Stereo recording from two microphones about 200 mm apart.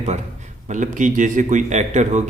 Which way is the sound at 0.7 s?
40° right (ahead or behind).